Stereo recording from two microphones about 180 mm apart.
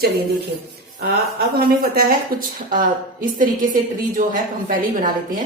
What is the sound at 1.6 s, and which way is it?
A woman's voice, 55° right (ahead or behind).